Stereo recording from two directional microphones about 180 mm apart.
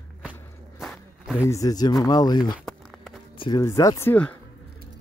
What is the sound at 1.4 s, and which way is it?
Speech, 20° left (ahead or behind).